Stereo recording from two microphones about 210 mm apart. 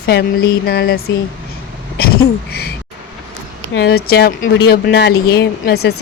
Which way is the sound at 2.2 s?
45° left (ahead or behind).